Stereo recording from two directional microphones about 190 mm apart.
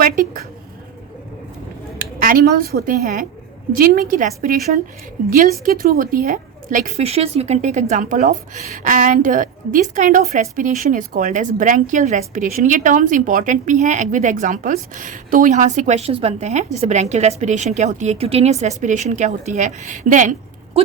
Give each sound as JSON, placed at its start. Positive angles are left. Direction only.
{"t": 0.0, "sound": "a woman's voice", "side_deg": -45}
{"t": 2.0, "sound": "a woman's voice", "side_deg": -45}